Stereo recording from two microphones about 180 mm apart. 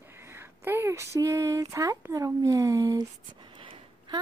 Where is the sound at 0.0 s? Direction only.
15° right (ahead or behind).